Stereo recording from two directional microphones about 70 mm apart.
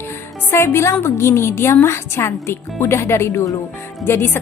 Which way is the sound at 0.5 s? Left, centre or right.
Left.